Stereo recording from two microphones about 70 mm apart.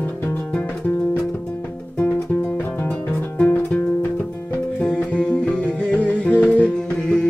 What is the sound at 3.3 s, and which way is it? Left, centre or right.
Music, centre.